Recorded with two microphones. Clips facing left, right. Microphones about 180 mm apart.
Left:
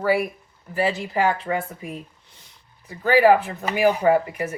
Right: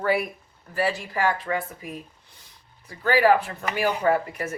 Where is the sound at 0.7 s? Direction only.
20° left (ahead or behind).